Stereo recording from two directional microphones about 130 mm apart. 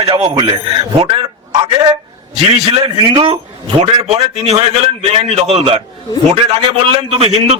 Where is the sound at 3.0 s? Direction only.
40° right (ahead or behind).